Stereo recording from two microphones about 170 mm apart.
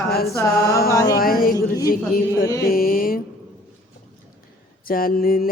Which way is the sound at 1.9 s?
60° left (ahead or behind).